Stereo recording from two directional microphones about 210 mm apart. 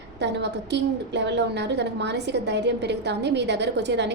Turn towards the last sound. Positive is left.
turn(degrees=-55)  # may be behind; listen again after turning